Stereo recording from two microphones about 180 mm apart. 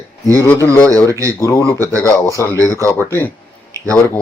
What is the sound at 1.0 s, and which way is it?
Speech, 20° right (ahead or behind).